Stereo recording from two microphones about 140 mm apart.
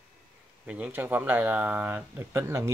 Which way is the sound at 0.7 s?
10° right (ahead or behind).